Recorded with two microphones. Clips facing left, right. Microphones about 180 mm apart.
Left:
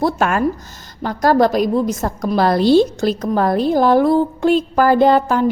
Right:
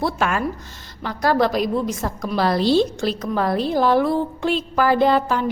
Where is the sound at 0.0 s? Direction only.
45° left (ahead or behind).